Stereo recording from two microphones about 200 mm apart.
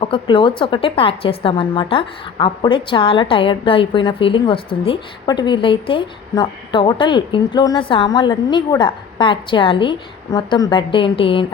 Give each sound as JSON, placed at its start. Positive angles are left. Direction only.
{"t": 0.0, "sound": "a woman's voice", "side_deg": 25}